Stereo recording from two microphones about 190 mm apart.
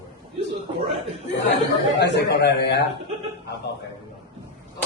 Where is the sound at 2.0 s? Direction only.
65° left (ahead or behind).